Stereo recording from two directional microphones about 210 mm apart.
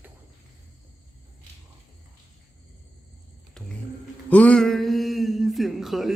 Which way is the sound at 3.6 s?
Centre (ahead or behind).